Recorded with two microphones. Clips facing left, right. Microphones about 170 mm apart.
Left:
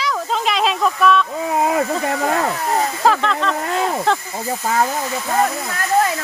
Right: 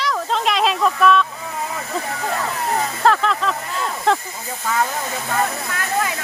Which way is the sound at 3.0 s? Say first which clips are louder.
Right 1 dB; centre (ahead or behind).